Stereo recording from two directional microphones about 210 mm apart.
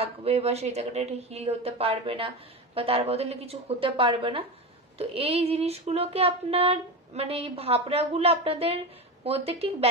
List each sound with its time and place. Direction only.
0.0 s a woman's voice: 30° right (ahead or behind)